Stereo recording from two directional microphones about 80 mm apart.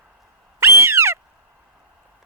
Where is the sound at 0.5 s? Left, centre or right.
Right.